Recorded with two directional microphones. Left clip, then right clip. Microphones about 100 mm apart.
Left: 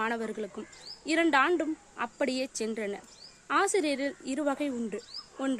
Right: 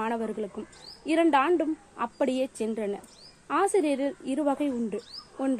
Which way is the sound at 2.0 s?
10° left (ahead or behind).